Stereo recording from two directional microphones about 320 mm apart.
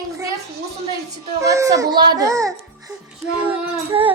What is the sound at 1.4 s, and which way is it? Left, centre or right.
A child's voice, centre.